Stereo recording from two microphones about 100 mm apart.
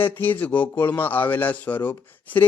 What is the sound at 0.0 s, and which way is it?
A man's voice, 20° left (ahead or behind).